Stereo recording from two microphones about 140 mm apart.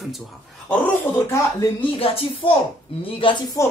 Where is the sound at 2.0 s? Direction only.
45° left (ahead or behind).